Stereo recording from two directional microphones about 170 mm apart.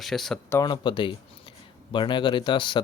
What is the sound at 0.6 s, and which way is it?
Speech, 25° left (ahead or behind).